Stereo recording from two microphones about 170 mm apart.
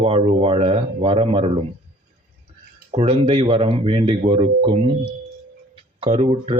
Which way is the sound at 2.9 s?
35° right (ahead or behind).